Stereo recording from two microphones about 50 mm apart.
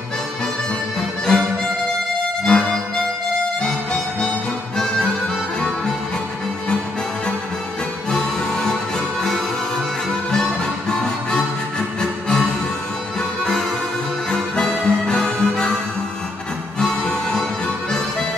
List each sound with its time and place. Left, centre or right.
1.3 s music: centre
4.7 s music: centre
8.1 s music: centre
10.3 s music: centre
14.3 s music: centre
17.1 s music: centre